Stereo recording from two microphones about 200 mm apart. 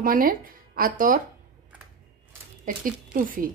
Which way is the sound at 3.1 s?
45° right (ahead or behind).